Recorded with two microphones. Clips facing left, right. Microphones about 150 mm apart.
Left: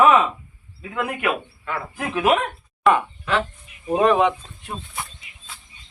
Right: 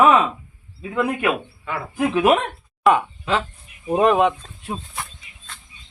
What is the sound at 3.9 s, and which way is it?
Speech, centre (ahead or behind).